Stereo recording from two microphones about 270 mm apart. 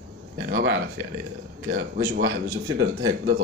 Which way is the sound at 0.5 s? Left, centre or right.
Right.